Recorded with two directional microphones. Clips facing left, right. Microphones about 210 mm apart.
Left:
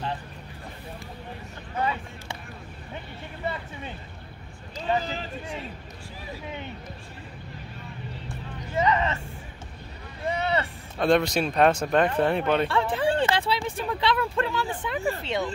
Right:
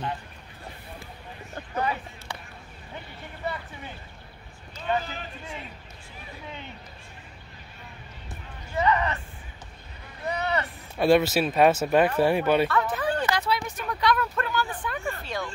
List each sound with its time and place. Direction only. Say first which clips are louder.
1.8 s a sound: even; 25° left (ahead or behind)
3.4 s a sound: left 1 dB; 25° left (ahead or behind)
8.7 s vehicle: even; 20° left (ahead or behind)
10.2 s vehicle: left 2 dB; 25° left (ahead or behind)
11.0 s speech: right 2 dB; 5° right (ahead or behind)
12.6 s speech: left 2 dB; 30° left (ahead or behind)